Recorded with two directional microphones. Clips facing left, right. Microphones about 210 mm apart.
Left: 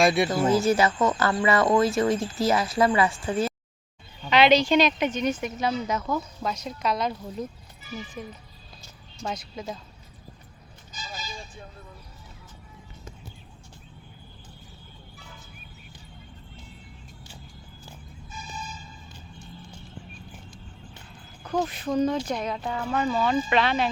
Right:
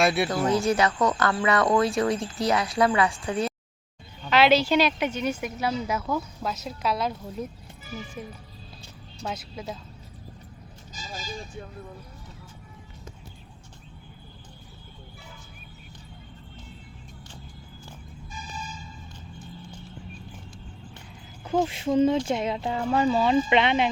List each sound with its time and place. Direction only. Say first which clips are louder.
0.0 s speech: left 2 dB; 5° right (ahead or behind)
9.2 s speech: left 1 dB; 5° right (ahead or behind)
10.9 s vehicle: right 2 dB; 40° right (ahead or behind)
21.4 s speech: right 3 dB; 25° right (ahead or behind)